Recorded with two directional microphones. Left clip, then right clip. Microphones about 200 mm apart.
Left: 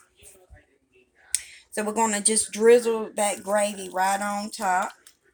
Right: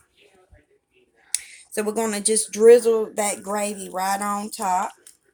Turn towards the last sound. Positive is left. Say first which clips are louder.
# right 1 dB
turn(degrees=-20)  # may be behind; listen again after turning